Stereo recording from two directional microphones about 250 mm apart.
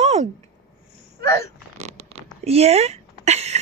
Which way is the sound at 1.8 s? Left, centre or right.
Right.